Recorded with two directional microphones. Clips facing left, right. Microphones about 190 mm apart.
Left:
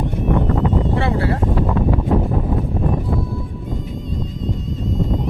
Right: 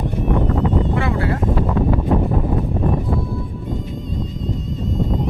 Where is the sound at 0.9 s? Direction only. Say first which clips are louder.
Left 1 dB; 30° left (ahead or behind).